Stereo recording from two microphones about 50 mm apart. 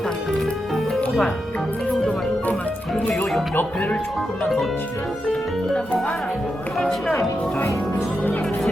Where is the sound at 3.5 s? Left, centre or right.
Left.